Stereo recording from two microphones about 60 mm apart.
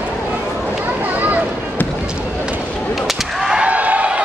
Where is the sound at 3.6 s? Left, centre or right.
Right.